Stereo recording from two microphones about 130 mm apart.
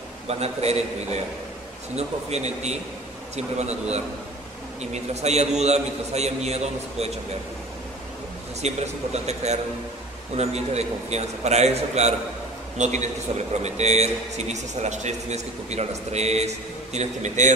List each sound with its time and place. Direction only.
0.3 s a man's voice: 55° right (ahead or behind)
4.9 s a man's voice: 55° right (ahead or behind)
8.5 s a man's voice: 55° right (ahead or behind)